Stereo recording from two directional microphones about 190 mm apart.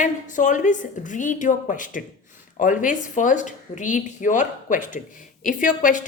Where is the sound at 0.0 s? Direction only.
40° left (ahead or behind).